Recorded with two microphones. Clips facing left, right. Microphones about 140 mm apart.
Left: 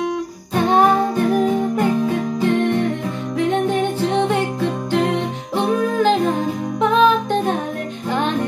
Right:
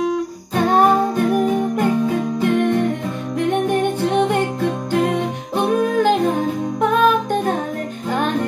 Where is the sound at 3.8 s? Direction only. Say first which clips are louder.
Right 1 dB; 15° right (ahead or behind).